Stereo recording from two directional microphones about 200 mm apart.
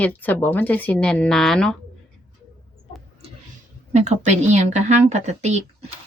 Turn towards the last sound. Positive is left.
turn(degrees=-35)  # may be behind; listen again after turning